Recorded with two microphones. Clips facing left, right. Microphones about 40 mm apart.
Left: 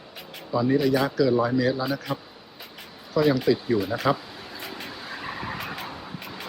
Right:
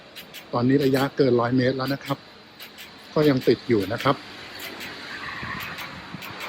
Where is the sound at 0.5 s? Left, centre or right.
Centre.